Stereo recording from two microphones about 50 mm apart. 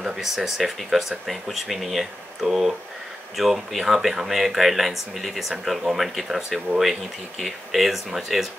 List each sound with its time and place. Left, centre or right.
0.0 s speech: centre